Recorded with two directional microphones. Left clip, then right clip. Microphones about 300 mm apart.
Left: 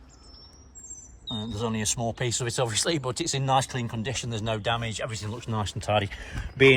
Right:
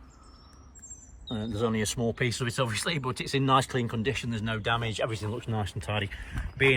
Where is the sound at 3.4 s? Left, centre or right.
Left.